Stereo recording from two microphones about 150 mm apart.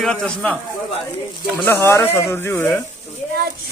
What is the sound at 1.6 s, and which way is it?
Speech, 15° left (ahead or behind).